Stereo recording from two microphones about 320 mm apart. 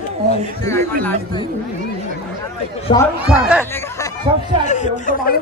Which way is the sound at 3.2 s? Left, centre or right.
Centre.